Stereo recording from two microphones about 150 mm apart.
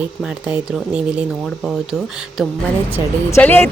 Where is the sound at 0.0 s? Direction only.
5° right (ahead or behind).